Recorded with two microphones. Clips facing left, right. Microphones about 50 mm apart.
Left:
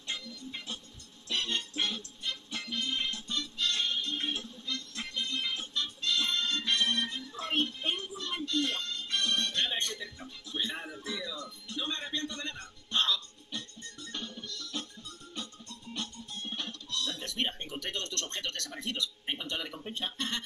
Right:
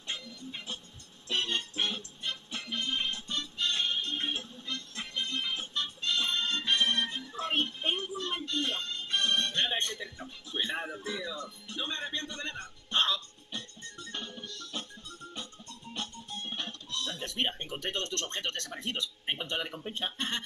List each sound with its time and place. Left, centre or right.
1.3 s music: right
15.9 s music: right
19.9 s speech: right